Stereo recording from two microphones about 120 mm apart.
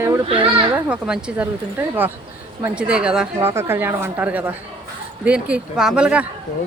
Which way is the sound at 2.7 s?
10° right (ahead or behind).